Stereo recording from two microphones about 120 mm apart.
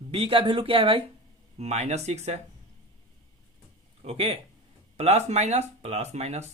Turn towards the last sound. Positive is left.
turn(degrees=-70)  # may be behind; listen again after turning